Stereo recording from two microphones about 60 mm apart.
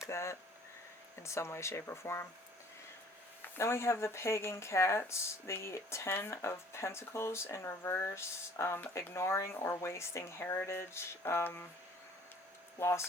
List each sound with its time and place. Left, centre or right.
0.1 s a sound: left
1.2 s speech: left
3.6 s speech: left
12.8 s speech: left